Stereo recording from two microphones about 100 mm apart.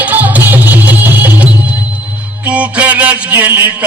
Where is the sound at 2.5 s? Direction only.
15° right (ahead or behind).